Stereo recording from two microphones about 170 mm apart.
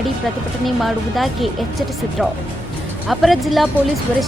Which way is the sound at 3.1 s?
Centre (ahead or behind).